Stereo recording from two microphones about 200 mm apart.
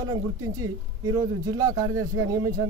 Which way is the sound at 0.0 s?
20° right (ahead or behind).